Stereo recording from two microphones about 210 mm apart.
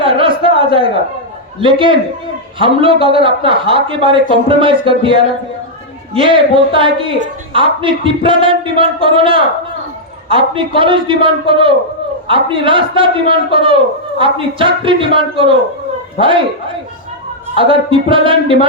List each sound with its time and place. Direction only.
0.0 s a sound: 25° right (ahead or behind)
1.6 s a man's voice: 25° right (ahead or behind)
17.5 s a man's voice: 25° right (ahead or behind)